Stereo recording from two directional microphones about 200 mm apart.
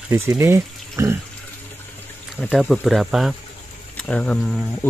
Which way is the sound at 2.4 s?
Centre (ahead or behind).